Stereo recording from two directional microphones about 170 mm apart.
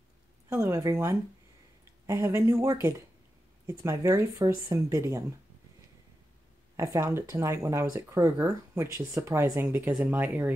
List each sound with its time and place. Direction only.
0.5 s speech: 15° right (ahead or behind)
6.8 s speech: 15° right (ahead or behind)